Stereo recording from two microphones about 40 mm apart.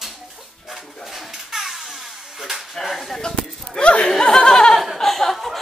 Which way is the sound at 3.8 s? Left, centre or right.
Left.